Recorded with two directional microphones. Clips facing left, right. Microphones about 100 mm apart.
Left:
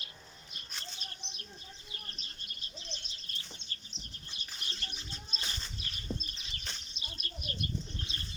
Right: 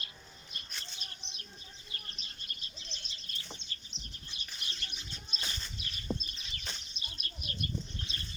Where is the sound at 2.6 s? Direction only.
35° left (ahead or behind).